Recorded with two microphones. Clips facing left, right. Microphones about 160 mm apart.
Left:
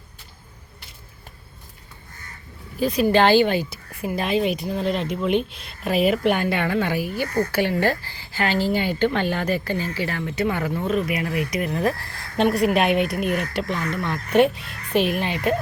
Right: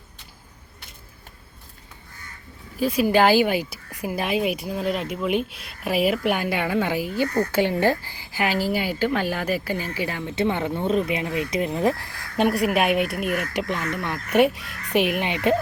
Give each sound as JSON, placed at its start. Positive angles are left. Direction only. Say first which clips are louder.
{"t": 2.7, "sound": "a woman's voice", "louder": "left 1 dB", "side_deg": -5}
{"t": 13.5, "sound": "a woman's voice", "louder": "left 1 dB", "side_deg": -15}